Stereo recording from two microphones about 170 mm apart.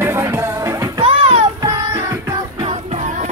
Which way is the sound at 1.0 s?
35° right (ahead or behind).